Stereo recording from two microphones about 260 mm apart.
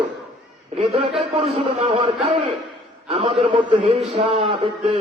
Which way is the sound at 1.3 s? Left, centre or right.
Right.